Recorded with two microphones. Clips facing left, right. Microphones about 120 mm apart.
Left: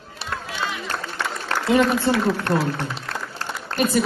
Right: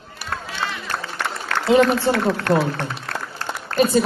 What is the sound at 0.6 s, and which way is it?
Run, 15° left (ahead or behind).